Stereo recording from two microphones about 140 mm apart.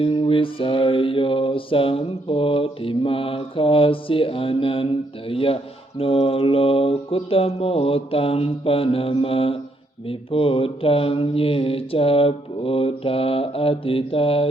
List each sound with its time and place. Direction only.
0.0 s mantra: 40° left (ahead or behind)